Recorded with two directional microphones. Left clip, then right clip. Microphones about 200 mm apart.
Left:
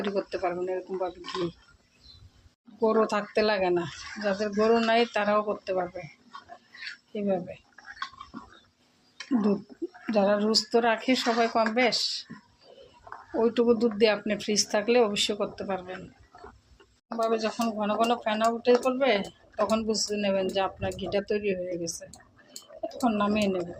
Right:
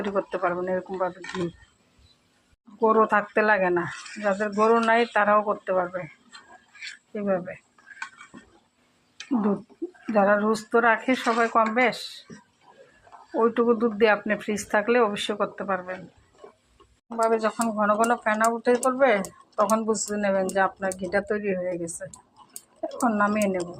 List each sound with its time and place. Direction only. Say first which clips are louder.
0.0 s speech: right 3 dB; centre (ahead or behind)
2.8 s speech: right 5 dB; 5° right (ahead or behind)
7.1 s speech: right 3 dB; centre (ahead or behind)
10.1 s speech: right 3 dB; centre (ahead or behind)
13.4 s speech: right 2 dB; centre (ahead or behind)
17.2 s speech: right 4 dB; 10° right (ahead or behind)
23.3 s speech: right 2 dB; centre (ahead or behind)